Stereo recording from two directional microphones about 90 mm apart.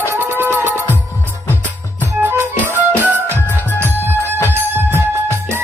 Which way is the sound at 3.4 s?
20° left (ahead or behind).